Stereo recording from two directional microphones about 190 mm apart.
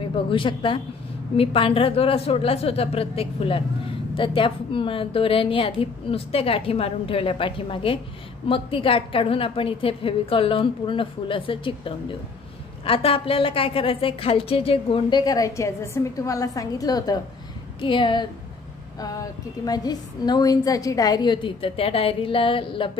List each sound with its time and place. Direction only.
0.1 s a woman's voice: 25° left (ahead or behind)